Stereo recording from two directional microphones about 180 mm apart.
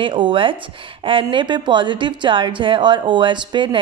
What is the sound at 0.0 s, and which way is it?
Speech, 25° right (ahead or behind).